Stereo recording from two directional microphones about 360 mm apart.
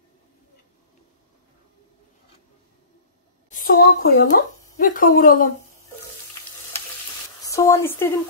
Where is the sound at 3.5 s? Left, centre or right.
Left.